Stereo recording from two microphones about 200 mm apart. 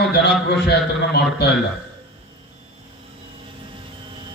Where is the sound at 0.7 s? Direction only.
55° left (ahead or behind).